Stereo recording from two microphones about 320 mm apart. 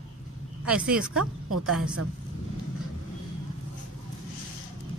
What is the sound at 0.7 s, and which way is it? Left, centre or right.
Speech, centre.